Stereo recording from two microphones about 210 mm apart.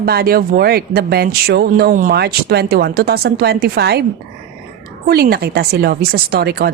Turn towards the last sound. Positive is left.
turn(degrees=-50)  # may be behind; listen again after turning